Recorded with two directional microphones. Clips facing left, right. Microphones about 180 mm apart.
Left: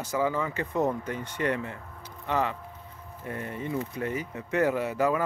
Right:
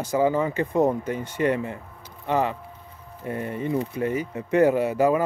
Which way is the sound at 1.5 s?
20° right (ahead or behind).